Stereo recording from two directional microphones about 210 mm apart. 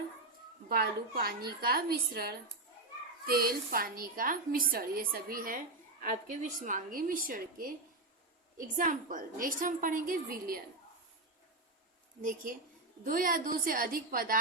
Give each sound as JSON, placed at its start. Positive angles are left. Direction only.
{"t": 0.7, "sound": "a woman's voice", "side_deg": -45}
{"t": 8.7, "sound": "a woman's voice", "side_deg": -40}
{"t": 13.1, "sound": "a woman's voice", "side_deg": -40}